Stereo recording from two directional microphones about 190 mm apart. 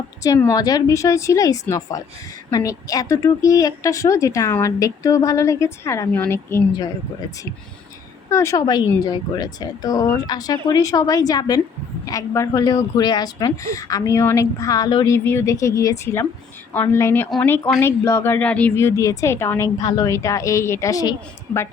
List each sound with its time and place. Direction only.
0.2 s a woman's voice: 15° left (ahead or behind)
8.3 s a woman's voice: 15° left (ahead or behind)